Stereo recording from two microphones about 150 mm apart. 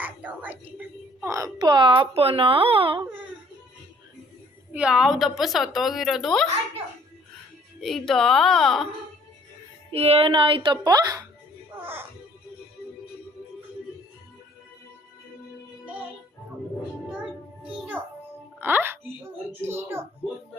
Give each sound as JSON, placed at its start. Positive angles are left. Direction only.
{"t": 0.0, "sound": "a sound", "side_deg": -10}
{"t": 1.2, "sound": "speech", "side_deg": -20}
{"t": 4.7, "sound": "a woman's voice", "side_deg": -5}
{"t": 7.8, "sound": "a woman's voice", "side_deg": 0}
{"t": 9.9, "sound": "speech", "side_deg": -40}
{"t": 17.7, "sound": "music", "side_deg": -10}
{"t": 18.6, "sound": "a child's voice", "side_deg": -15}